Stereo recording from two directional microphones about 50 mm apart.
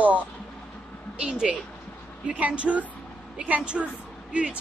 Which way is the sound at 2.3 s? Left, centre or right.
Right.